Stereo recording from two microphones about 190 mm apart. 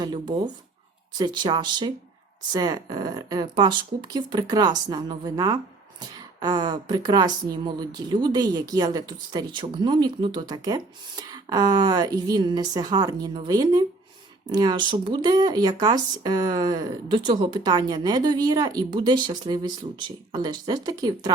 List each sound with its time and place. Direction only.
0.0 s speech: 20° right (ahead or behind)